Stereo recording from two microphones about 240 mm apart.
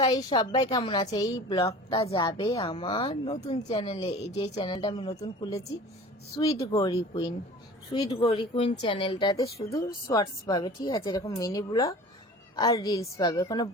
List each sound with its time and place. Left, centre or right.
0.0 s a woman's voice: centre